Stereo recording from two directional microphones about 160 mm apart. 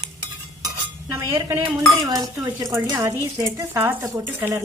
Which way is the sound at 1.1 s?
15° right (ahead or behind).